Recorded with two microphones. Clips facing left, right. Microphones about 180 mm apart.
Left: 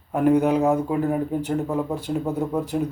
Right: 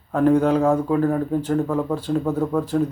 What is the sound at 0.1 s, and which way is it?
Speech, 15° left (ahead or behind).